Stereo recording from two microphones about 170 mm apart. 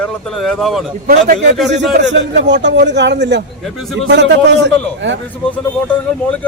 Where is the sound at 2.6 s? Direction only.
90° right.